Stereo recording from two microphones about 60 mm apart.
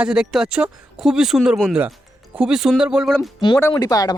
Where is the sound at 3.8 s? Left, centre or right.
Left.